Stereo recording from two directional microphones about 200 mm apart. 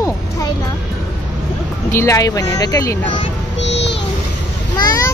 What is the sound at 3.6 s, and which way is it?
Music, 60° left (ahead or behind).